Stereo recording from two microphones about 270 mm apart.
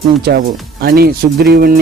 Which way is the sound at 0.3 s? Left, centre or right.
Right.